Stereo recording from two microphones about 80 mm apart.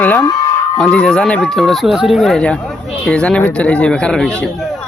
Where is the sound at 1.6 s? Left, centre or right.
Centre.